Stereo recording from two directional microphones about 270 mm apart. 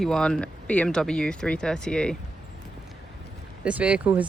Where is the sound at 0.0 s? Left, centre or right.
Centre.